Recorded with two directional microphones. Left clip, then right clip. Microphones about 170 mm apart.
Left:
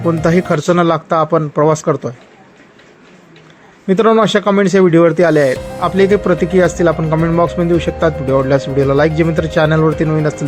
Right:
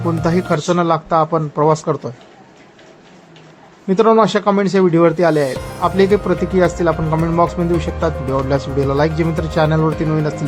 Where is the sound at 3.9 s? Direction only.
5° left (ahead or behind).